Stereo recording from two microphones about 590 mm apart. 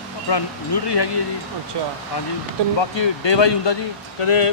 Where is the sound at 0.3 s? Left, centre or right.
Left.